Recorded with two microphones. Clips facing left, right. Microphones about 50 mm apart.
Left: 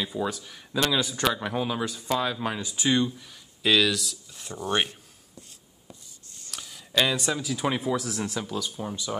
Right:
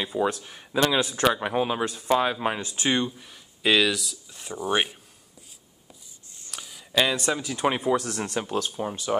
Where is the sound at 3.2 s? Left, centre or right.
Centre.